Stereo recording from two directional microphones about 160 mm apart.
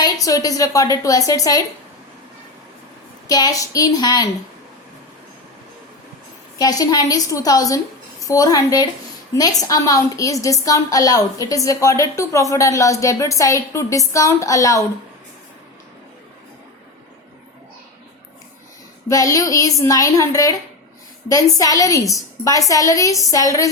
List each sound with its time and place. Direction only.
0.0 s a woman's voice: 20° left (ahead or behind)
3.2 s a woman's voice: 25° left (ahead or behind)
6.6 s a woman's voice: 25° left (ahead or behind)
19.0 s a woman's voice: 20° left (ahead or behind)